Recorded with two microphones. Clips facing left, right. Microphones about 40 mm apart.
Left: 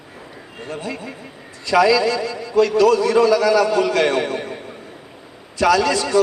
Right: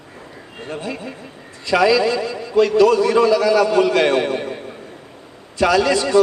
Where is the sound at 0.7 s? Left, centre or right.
Centre.